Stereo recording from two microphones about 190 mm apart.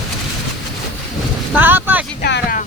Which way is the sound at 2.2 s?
60° left (ahead or behind).